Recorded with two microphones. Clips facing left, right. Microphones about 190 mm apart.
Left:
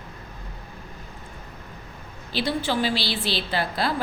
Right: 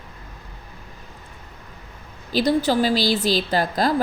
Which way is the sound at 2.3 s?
40° right (ahead or behind).